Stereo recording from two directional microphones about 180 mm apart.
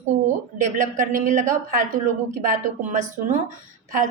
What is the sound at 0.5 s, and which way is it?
A woman's voice, 50° right (ahead or behind).